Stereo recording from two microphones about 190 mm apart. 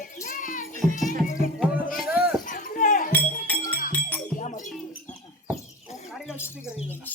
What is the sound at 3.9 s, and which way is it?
Music, 10° left (ahead or behind).